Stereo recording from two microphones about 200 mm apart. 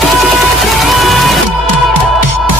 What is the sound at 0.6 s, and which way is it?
Music, centre (ahead or behind).